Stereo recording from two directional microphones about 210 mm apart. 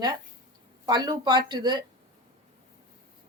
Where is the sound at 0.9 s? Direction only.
20° right (ahead or behind).